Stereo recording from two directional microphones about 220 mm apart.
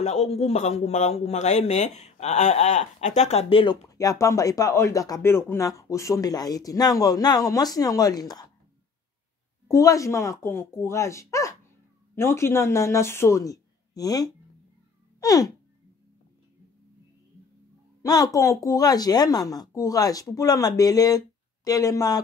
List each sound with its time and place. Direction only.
0.0 s speech: 30° left (ahead or behind)
9.7 s speech: 15° left (ahead or behind)
15.1 s a sound: 15° left (ahead or behind)
18.0 s speech: 15° left (ahead or behind)